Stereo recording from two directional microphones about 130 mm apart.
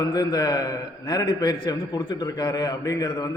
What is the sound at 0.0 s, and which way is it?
A man's voice, 30° left (ahead or behind).